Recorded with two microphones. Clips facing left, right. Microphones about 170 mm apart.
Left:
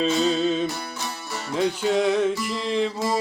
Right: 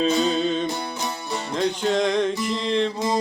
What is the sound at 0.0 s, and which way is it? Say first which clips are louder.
Music: even; 5° left (ahead or behind).